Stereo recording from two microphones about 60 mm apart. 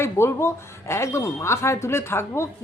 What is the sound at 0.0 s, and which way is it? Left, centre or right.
A woman's voice, left.